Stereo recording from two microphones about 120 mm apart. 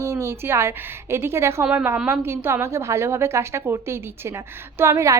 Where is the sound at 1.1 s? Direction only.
20° right (ahead or behind).